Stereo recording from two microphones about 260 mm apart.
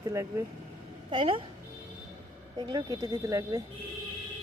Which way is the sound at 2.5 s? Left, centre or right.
Centre.